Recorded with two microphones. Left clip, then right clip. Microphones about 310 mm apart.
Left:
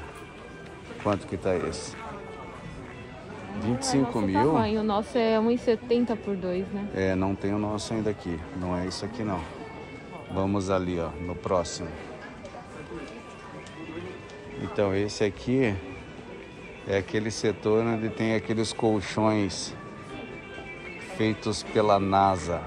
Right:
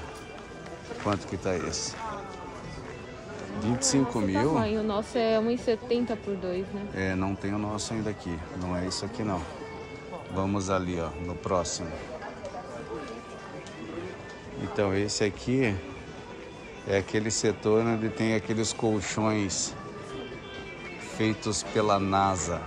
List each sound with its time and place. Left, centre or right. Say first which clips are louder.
1.0 s speech: left 3 dB; centre
3.6 s speech: even; centre
4.6 s a woman's voice: left 2 dB; left
7.0 s speech: left 4 dB; centre
14.8 s speech: left 1 dB; centre
16.8 s speech: even; centre
21.2 s speech: left 1 dB; centre